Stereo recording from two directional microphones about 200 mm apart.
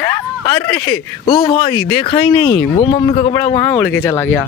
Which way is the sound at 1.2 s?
20° left (ahead or behind).